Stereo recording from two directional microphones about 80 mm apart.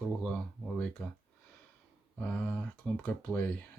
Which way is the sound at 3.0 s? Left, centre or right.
Left.